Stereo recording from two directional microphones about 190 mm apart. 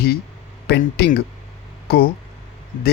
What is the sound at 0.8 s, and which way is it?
Speech, 55° left (ahead or behind).